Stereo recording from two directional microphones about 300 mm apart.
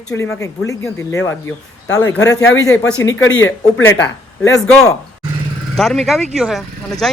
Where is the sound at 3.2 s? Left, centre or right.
Left.